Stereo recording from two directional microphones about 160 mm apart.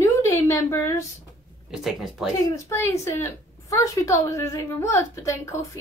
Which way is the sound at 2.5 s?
20° left (ahead or behind).